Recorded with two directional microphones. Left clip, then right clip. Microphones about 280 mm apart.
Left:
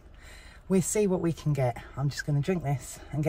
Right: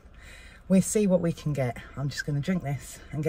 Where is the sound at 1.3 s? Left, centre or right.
Centre.